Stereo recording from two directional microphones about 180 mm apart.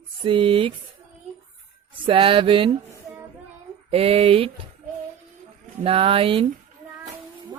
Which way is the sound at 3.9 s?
35° right (ahead or behind).